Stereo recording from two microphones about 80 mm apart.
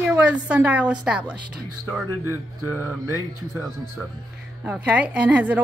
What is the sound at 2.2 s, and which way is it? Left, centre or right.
Speech, right.